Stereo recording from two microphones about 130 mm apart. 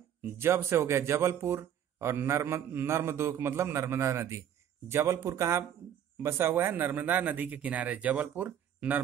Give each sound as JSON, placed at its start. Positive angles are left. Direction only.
{"t": 0.2, "sound": "speech", "side_deg": -15}